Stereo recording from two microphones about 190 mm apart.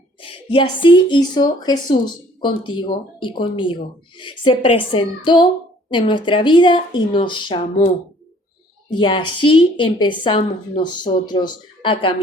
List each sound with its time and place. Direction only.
0.2 s a woman's voice: 25° left (ahead or behind)